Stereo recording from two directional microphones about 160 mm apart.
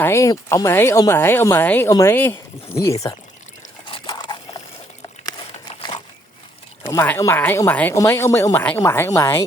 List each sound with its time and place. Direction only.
0.0 s speech: 15° left (ahead or behind)
3.9 s a sound: 25° left (ahead or behind)
6.8 s speech: 15° left (ahead or behind)